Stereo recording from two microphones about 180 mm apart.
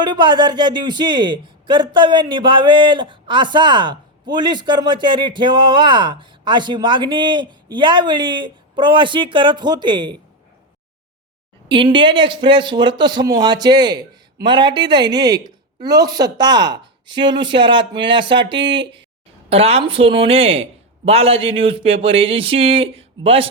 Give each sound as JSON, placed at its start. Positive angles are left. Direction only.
{"t": 0.0, "sound": "speech", "side_deg": -25}
{"t": 11.7, "sound": "speech", "side_deg": -25}